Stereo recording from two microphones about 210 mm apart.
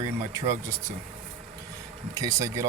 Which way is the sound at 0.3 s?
15° right (ahead or behind).